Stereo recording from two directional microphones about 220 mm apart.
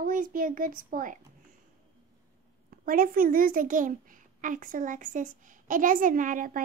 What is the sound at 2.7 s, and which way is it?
A child's voice, 40° right (ahead or behind).